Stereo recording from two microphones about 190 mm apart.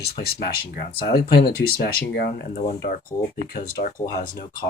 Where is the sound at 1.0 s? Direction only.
55° left (ahead or behind).